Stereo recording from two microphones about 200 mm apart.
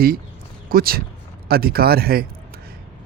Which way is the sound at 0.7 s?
50° right (ahead or behind).